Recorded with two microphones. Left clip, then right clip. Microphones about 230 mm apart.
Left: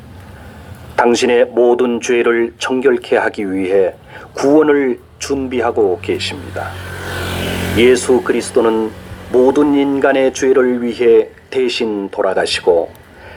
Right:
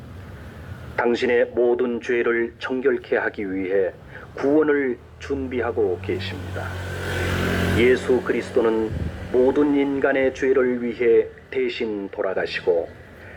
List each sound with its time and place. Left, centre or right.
0.9 s speech: left
7.8 s speech: left